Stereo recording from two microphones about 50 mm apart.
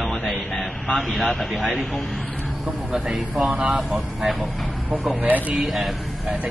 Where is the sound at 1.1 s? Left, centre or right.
Centre.